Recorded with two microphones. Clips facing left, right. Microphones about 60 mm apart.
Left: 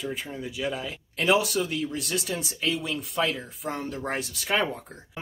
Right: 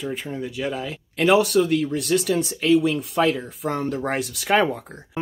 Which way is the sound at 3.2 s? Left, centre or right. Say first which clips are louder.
Right 6 dB; right.